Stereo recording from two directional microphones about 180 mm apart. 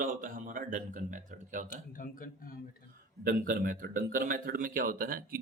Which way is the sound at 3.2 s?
50° right (ahead or behind).